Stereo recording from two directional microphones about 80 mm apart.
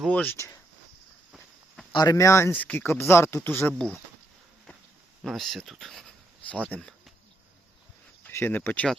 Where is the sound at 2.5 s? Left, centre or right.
Left.